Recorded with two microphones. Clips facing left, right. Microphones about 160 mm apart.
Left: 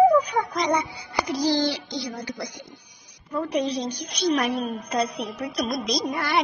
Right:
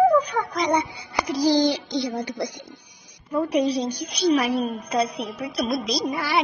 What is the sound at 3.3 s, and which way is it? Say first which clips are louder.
A woman's voice: right 4 dB; 10° right (ahead or behind).